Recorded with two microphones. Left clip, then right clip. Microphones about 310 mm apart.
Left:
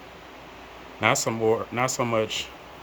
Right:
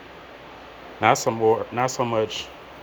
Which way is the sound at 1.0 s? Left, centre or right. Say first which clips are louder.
Right 4 dB; centre.